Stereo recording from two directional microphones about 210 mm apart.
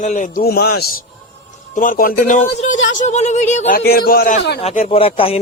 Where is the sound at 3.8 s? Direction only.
50° left (ahead or behind).